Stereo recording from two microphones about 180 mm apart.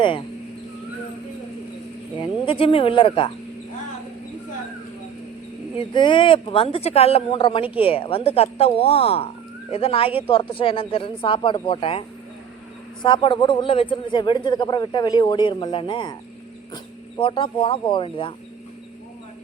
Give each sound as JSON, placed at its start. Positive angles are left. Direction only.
{"t": 2.1, "sound": "speech", "side_deg": 30}
{"t": 5.7, "sound": "speech", "side_deg": 25}